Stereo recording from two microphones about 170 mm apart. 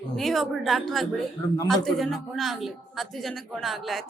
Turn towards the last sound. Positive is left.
turn(degrees=0)  # may be behind; listen again after turning